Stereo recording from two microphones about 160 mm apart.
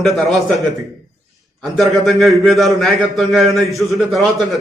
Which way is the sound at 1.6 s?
Centre (ahead or behind).